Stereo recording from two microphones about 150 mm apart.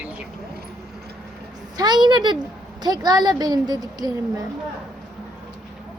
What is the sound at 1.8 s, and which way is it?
A woman's voice, 30° right (ahead or behind).